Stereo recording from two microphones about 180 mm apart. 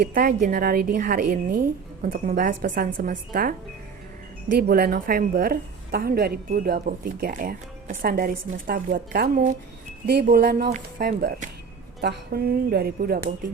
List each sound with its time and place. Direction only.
0.1 s a woman's voice: 55° right (ahead or behind)
4.5 s a woman's voice: 60° right (ahead or behind)
10.7 s speech: 40° right (ahead or behind)
11.0 s a woman's voice: 55° right (ahead or behind)